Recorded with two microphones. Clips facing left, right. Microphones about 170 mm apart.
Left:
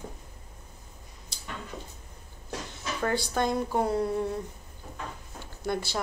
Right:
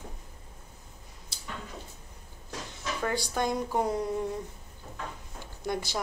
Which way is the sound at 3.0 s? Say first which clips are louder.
Left 3 dB; 10° right (ahead or behind).